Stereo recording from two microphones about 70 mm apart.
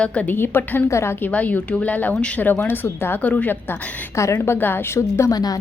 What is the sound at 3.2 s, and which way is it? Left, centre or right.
Speech, left.